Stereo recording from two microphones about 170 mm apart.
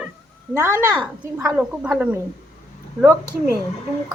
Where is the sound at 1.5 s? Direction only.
10° right (ahead or behind).